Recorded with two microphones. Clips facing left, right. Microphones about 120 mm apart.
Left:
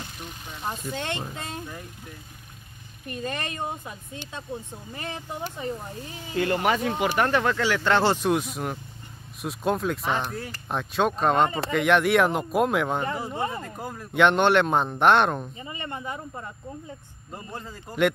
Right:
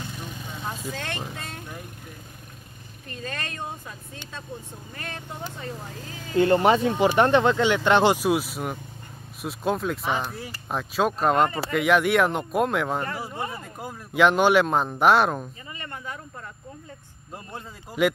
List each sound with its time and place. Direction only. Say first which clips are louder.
0.9 s speech: left 2 dB; 20° left (ahead or behind)
3.1 s speech: left 3 dB; 15° left (ahead or behind)
6.3 s speech: right 5 dB; 30° right (ahead or behind)
8.2 s speech: right 1 dB; 5° right (ahead or behind)
15.7 s speech: left 4 dB; 20° left (ahead or behind)
17.3 s speech: left 1 dB; centre (ahead or behind)